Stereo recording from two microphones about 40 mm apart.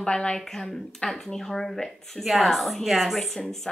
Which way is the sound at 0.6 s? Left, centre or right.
Centre.